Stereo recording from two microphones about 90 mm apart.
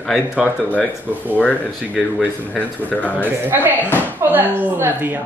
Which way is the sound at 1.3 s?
15° left (ahead or behind).